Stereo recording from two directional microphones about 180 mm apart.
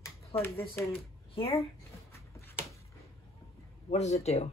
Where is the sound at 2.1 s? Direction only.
15° left (ahead or behind).